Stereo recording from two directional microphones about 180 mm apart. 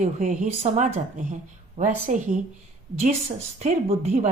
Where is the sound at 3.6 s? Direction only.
40° right (ahead or behind).